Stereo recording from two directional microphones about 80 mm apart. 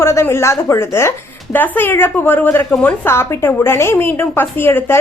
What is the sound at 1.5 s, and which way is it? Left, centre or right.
A woman's voice, left.